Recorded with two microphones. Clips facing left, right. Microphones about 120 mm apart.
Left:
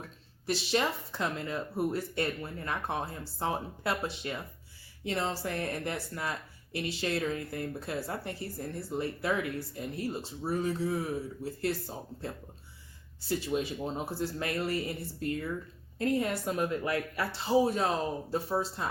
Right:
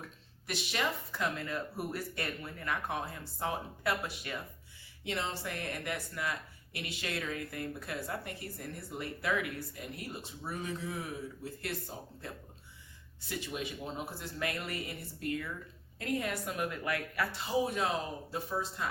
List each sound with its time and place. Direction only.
0.4 s speech: 30° left (ahead or behind)